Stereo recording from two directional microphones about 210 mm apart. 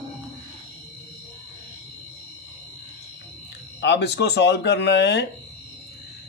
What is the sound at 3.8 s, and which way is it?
Speech, 55° left (ahead or behind).